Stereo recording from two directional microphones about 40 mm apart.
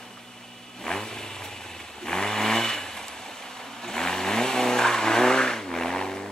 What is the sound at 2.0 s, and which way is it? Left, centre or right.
Vehicle, centre.